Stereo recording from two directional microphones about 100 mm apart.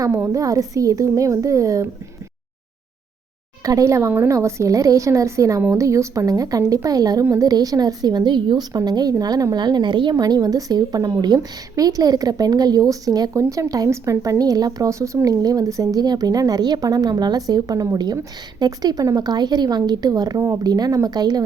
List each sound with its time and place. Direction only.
0.3 s speech: 35° right (ahead or behind)
3.6 s speech: 35° right (ahead or behind)